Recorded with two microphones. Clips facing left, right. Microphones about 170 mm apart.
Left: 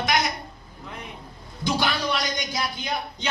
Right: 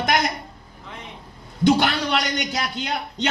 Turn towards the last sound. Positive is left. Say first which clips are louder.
# right 3 dB
turn(degrees=-70)  # may be behind; listen again after turning